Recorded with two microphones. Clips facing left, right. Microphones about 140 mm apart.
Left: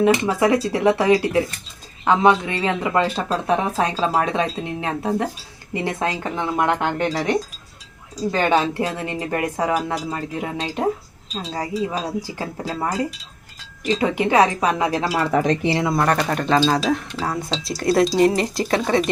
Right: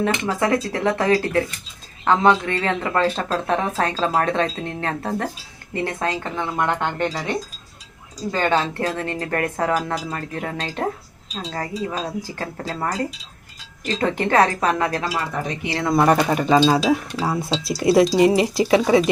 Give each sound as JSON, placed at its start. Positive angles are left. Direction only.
{"t": 0.0, "sound": "speech", "side_deg": 15}
{"t": 8.3, "sound": "speech", "side_deg": 15}
{"t": 15.1, "sound": "speech", "side_deg": 80}
{"t": 16.0, "sound": "speech", "side_deg": -5}